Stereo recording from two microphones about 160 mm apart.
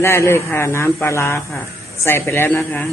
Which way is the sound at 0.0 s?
15° left (ahead or behind).